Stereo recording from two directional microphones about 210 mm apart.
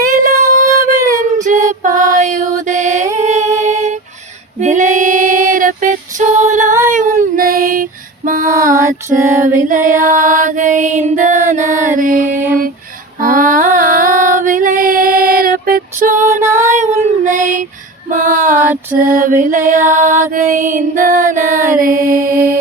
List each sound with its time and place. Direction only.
0.0 s music: 40° right (ahead or behind)
0.6 s child singing: 15° right (ahead or behind)
1.0 s female singing: 15° right (ahead or behind)
1.8 s music: 35° right (ahead or behind)
3.1 s singing: 35° right (ahead or behind)
4.6 s female singing: 35° right (ahead or behind)
8.6 s music: 40° right (ahead or behind)
13.1 s female singing: 40° right (ahead or behind)
16.2 s music: 10° right (ahead or behind)
17.2 s child singing: 40° right (ahead or behind)
18.1 s female singing: 40° right (ahead or behind)
18.9 s music: 40° right (ahead or behind)